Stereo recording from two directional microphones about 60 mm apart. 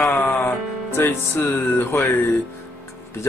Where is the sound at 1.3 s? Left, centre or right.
Left.